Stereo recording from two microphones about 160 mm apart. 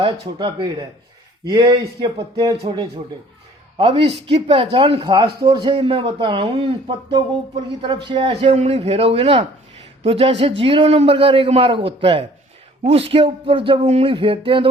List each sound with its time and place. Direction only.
0.0 s speech: 30° right (ahead or behind)
3.8 s a man's voice: 35° right (ahead or behind)